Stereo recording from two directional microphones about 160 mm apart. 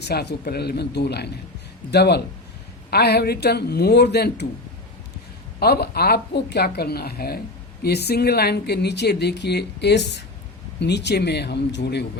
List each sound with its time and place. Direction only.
0.0 s a woman's voice: 85° left
5.5 s a woman's voice: 85° left